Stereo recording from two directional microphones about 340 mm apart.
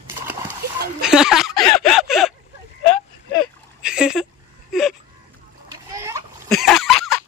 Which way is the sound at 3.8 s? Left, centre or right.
Centre.